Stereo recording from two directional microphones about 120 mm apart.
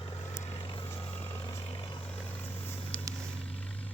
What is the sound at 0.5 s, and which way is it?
Vehicle, 40° left (ahead or behind).